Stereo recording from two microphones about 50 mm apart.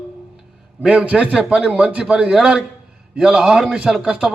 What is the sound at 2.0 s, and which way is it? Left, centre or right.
A man's voice, centre.